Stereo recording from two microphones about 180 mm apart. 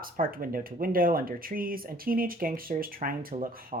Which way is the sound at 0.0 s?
55° right (ahead or behind).